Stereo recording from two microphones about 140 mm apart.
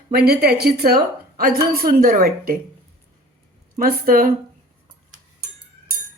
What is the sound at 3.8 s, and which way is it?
Speech, 90° right.